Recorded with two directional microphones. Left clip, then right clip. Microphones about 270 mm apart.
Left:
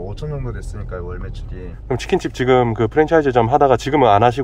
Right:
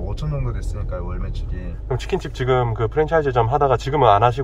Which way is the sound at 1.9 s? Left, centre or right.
Left.